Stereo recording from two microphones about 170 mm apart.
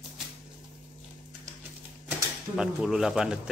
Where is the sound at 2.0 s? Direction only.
5° right (ahead or behind).